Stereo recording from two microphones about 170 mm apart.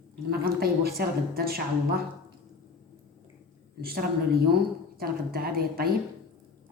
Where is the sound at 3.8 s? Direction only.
65° right (ahead or behind).